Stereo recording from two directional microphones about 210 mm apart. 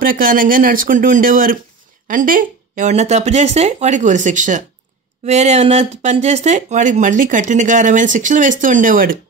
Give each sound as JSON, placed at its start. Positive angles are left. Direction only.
{"t": 0.0, "sound": "speech", "side_deg": -40}